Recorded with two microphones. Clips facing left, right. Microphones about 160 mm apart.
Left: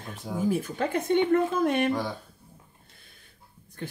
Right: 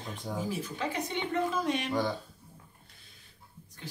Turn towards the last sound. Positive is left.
turn(degrees=55)  # may be behind; listen again after turning